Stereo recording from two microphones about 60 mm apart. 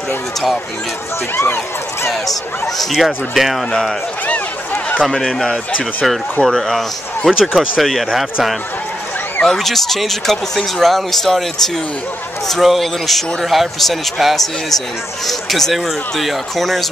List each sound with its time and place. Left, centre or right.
1.3 s speech: left
2.6 s speech: centre
5.0 s speech: centre
7.2 s speech: centre
9.4 s speech: centre
12.4 s speech: centre